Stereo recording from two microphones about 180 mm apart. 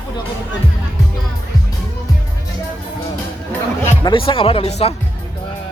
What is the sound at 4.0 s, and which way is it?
Speech, 25° left (ahead or behind).